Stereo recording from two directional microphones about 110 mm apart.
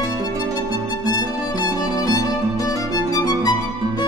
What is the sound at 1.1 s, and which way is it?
Music, 35° left (ahead or behind).